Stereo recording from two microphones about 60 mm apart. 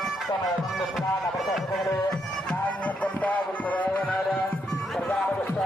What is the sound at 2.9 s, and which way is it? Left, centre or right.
Music, left.